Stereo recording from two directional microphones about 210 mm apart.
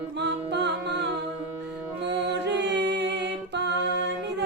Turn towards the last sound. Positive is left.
turn(degrees=-55)  # may be behind; listen again after turning